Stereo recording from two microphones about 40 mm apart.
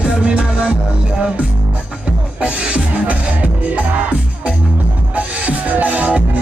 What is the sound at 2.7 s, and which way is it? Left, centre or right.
Music, right.